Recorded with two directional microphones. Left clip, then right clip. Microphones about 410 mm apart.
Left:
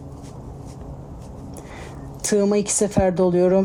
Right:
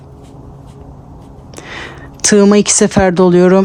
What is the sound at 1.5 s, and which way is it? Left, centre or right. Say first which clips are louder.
A woman's voice: right 13 dB; right.